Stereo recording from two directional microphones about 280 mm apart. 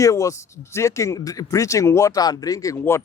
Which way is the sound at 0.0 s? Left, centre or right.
Centre.